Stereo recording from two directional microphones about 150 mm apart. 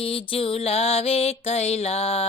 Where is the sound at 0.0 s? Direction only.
40° left (ahead or behind).